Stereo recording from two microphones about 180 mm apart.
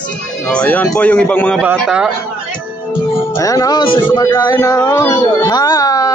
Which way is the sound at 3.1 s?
15° left (ahead or behind).